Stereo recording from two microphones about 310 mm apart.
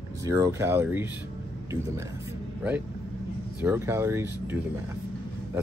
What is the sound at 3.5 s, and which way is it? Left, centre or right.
Speech, centre.